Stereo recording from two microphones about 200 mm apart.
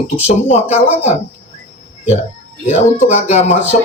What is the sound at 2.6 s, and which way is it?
Speech, 35° left (ahead or behind).